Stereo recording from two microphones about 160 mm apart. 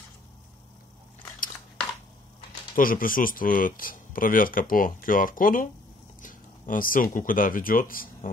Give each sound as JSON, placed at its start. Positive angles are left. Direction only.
{"t": 2.7, "sound": "speech", "side_deg": 60}